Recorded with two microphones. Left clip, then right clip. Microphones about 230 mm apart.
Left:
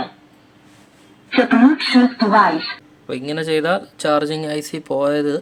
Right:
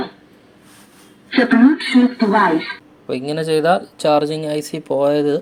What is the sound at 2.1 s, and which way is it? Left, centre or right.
Speech, centre.